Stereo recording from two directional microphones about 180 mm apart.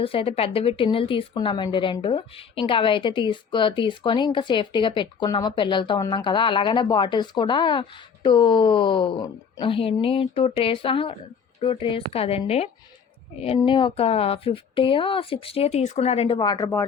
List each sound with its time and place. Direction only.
0.0 s a woman's voice: 30° left (ahead or behind)